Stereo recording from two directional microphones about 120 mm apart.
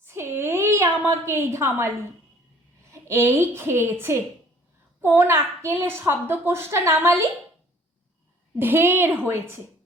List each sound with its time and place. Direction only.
0.0 s a woman's voice: 20° right (ahead or behind)
2.9 s a child's voice: 20° right (ahead or behind)
8.5 s a child's voice: 20° right (ahead or behind)